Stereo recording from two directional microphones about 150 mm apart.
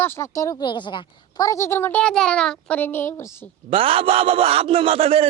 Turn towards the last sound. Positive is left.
turn(degrees=-40)  # may be behind; listen again after turning